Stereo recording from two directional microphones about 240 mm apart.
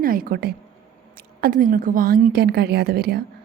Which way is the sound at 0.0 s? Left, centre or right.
Right.